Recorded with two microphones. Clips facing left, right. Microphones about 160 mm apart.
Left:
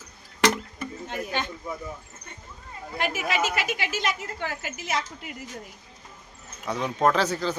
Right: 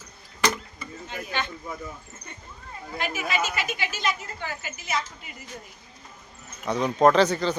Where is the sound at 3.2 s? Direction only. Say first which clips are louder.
Left 1 dB; 75° left (ahead or behind).